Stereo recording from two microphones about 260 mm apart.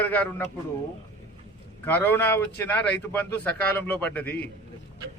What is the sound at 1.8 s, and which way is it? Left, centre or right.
A man's voice, centre.